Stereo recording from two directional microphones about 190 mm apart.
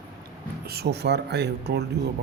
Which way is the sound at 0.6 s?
60° right (ahead or behind).